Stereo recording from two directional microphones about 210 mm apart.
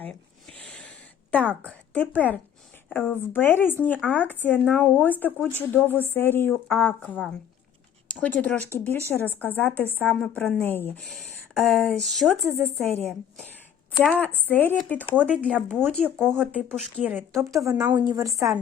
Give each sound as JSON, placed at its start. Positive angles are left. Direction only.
{"t": 0.0, "sound": "a sound", "side_deg": 5}
{"t": 2.9, "sound": "speech", "side_deg": 10}
{"t": 16.4, "sound": "a woman's voice", "side_deg": -5}